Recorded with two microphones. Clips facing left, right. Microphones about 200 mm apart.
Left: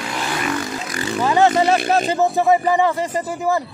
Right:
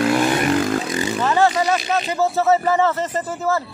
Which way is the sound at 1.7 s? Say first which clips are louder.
Left 4 dB; 50° left (ahead or behind).